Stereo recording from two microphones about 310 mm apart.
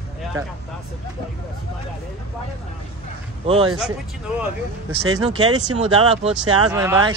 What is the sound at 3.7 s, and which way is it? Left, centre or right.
Speech, centre.